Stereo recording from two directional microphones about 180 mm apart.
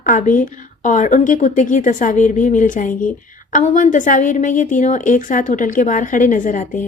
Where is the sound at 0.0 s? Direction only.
45° left (ahead or behind).